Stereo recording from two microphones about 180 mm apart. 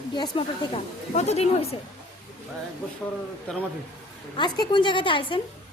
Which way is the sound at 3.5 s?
5° left (ahead or behind).